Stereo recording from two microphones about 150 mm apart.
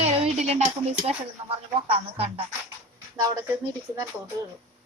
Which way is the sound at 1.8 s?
40° right (ahead or behind).